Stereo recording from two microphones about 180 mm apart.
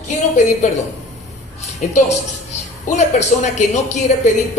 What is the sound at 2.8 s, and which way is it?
A woman's voice, 40° left (ahead or behind).